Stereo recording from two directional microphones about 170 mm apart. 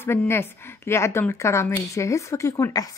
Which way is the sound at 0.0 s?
15° left (ahead or behind).